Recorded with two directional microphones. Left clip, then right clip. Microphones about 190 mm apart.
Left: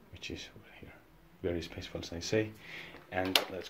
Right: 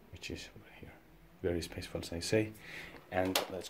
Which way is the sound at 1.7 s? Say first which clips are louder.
Even; 65° right (ahead or behind).